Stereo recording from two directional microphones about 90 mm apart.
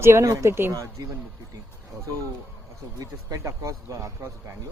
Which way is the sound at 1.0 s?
50° right (ahead or behind).